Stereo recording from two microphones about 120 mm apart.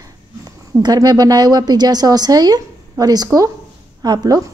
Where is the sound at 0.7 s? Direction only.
30° right (ahead or behind).